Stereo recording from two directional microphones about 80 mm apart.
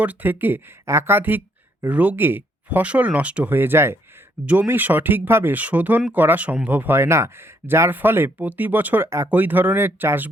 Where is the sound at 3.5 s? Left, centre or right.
Right.